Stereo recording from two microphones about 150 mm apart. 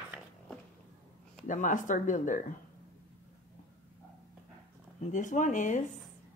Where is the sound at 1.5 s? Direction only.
55° left (ahead or behind).